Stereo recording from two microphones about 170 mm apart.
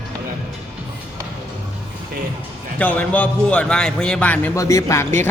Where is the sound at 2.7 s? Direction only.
10° left (ahead or behind).